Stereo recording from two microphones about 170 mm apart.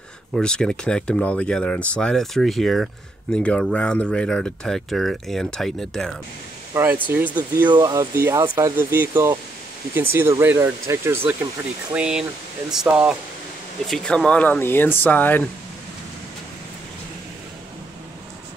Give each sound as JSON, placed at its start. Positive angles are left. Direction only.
{"t": 0.3, "sound": "speech", "side_deg": 5}
{"t": 6.7, "sound": "speech", "side_deg": -10}